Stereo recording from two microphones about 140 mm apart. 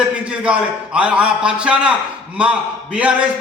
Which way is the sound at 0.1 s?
10° right (ahead or behind).